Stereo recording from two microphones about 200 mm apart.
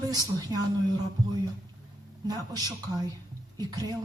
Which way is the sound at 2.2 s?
20° right (ahead or behind).